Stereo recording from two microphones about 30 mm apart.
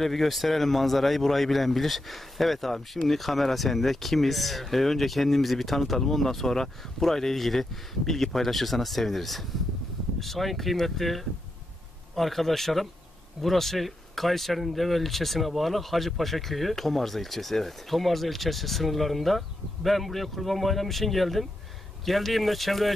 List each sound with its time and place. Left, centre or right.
0.0 s speech: centre